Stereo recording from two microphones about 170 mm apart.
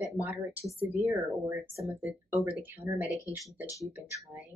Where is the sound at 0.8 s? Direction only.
10° right (ahead or behind).